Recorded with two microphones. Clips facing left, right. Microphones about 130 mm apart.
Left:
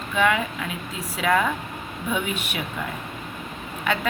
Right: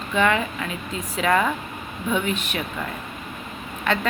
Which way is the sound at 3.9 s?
10° left (ahead or behind).